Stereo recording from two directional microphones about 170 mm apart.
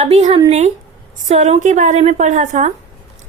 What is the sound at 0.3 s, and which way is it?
A woman's voice, 40° right (ahead or behind).